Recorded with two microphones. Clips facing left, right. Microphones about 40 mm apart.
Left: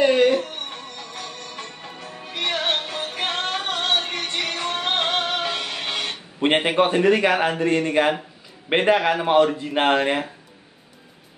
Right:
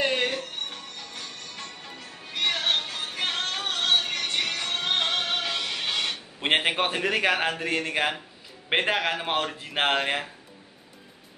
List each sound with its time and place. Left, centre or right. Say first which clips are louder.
0.0 s music: left 9 dB; centre
0.4 s music: left 5 dB; left
6.4 s speech: left 6 dB; centre